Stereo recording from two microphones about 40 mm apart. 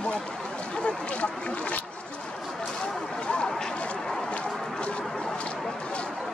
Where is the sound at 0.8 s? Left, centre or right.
Left.